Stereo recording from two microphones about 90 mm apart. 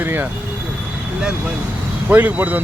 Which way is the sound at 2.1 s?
20° right (ahead or behind).